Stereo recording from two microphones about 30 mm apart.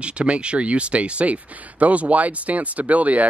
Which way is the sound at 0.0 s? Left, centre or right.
Right.